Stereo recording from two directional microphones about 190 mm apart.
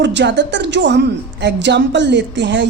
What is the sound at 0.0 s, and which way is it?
A woman's voice, 70° right (ahead or behind).